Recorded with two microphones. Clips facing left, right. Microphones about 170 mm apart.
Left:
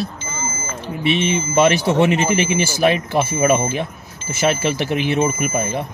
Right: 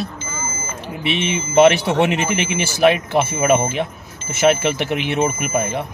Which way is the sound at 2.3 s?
60° right (ahead or behind).